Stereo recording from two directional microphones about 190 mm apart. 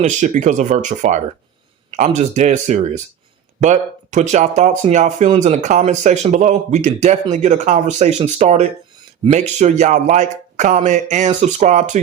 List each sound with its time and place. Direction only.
0.0 s speech: 40° right (ahead or behind)